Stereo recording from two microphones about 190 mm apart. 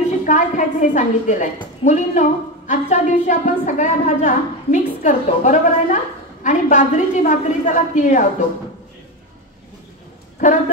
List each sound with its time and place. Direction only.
0.2 s a woman's voice: 40° left (ahead or behind)